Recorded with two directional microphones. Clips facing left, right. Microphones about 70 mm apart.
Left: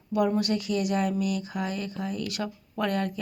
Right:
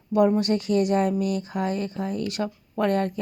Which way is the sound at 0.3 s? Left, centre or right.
Right.